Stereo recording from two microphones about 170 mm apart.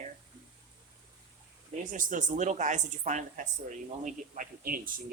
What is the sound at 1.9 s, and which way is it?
Speech, 50° right (ahead or behind).